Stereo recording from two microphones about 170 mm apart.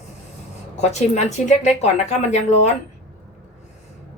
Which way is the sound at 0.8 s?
40° left (ahead or behind).